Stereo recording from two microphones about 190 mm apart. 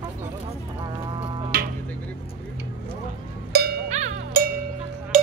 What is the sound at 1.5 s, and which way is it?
Music, 50° right (ahead or behind).